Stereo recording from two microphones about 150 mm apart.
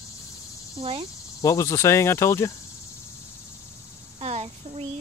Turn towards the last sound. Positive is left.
turn(degrees=-45)  # may be behind; listen again after turning